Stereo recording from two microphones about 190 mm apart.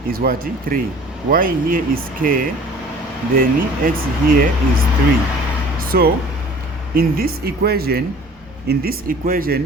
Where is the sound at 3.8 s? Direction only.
50° right (ahead or behind).